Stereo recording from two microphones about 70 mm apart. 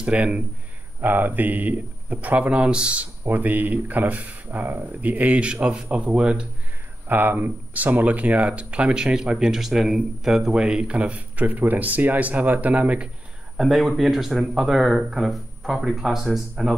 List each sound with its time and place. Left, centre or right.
0.0 s speech: centre
7.1 s speech: right
13.6 s speech: centre